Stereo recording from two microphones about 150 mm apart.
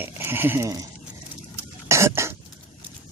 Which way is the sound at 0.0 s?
15° right (ahead or behind).